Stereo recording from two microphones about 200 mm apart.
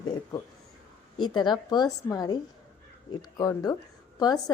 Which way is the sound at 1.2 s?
20° left (ahead or behind).